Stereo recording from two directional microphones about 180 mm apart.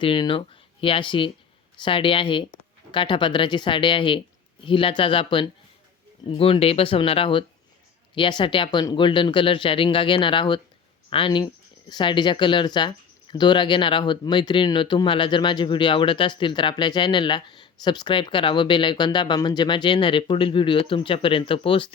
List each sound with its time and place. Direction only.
0.0 s speech: 25° left (ahead or behind)